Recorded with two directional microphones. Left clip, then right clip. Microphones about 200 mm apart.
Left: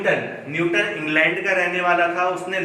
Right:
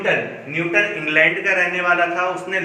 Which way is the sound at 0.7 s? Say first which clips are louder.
Right 4 dB; 10° right (ahead or behind).